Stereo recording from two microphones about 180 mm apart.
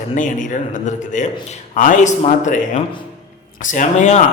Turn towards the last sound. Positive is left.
turn(degrees=40)  # may be behind; listen again after turning